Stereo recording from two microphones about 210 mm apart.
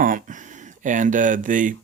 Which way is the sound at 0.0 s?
40° right (ahead or behind).